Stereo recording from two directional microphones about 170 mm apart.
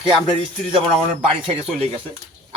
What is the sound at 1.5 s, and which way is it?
Speech, 35° right (ahead or behind).